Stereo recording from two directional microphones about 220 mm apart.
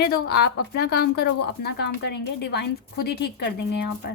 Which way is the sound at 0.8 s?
45° left (ahead or behind).